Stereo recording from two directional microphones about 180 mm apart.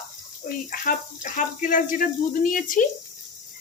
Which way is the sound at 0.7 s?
50° left (ahead or behind).